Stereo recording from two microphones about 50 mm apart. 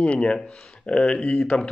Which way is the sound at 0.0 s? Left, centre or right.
Left.